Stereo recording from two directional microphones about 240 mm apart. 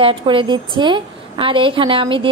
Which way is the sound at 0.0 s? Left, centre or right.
Right.